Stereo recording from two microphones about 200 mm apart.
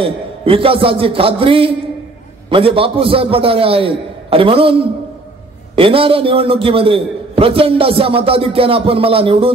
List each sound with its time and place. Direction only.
0.0 s a man's voice: 25° right (ahead or behind)
5.8 s a man's voice: 25° right (ahead or behind)